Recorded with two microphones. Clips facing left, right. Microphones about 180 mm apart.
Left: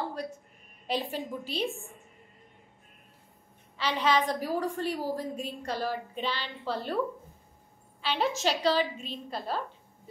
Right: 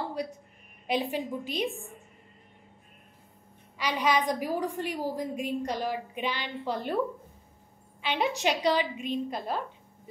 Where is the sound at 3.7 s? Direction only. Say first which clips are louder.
Even; 15° right (ahead or behind).